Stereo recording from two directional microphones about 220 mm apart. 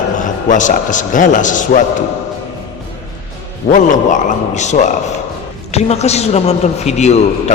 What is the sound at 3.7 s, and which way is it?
A man's voice, 35° left (ahead or behind).